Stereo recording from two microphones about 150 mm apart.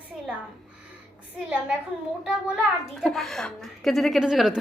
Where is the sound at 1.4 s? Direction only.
10° right (ahead or behind).